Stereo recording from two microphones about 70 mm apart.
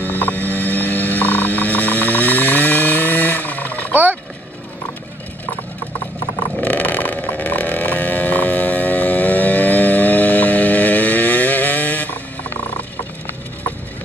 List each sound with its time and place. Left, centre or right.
0.0 s a sound: left
3.9 s vehicle: right
6.6 s vehicle: left